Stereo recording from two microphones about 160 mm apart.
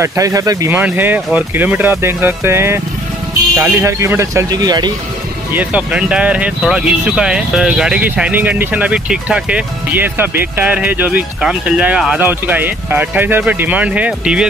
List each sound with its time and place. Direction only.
0.0 s speech: 20° right (ahead or behind)
5.5 s speech: 10° right (ahead or behind)